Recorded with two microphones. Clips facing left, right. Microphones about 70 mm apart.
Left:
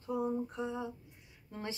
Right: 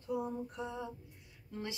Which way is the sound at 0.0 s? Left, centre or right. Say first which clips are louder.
Left 3 dB; left.